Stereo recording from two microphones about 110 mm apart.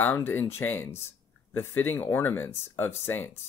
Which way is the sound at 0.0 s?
20° left (ahead or behind).